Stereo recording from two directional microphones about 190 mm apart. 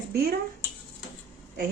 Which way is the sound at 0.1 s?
55° right (ahead or behind).